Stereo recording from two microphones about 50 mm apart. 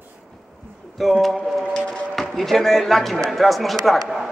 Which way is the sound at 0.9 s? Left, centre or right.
Centre.